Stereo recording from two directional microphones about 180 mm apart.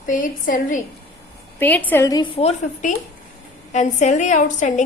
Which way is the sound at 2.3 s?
35° left (ahead or behind).